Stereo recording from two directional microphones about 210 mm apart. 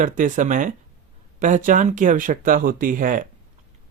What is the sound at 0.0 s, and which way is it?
Speech, 35° right (ahead or behind).